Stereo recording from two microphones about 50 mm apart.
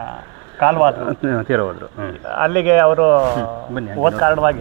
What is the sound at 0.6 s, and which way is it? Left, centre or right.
Speech, centre.